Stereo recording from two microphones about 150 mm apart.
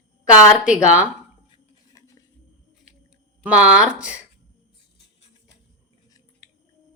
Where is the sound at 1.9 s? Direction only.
20° left (ahead or behind).